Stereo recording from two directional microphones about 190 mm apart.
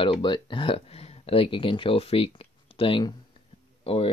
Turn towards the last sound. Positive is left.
turn(degrees=30)  # may be behind; listen again after turning